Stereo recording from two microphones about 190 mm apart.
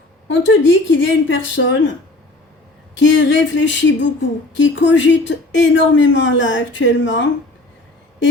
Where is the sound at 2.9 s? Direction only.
75° left (ahead or behind).